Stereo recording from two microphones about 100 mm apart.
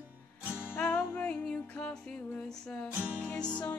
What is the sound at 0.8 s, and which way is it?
Music, 20° left (ahead or behind).